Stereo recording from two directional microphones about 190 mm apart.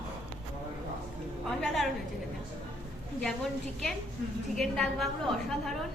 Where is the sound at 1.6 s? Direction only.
Centre (ahead or behind).